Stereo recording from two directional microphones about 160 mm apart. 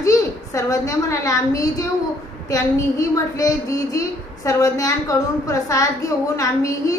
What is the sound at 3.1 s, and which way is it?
A woman's voice, 20° left (ahead or behind).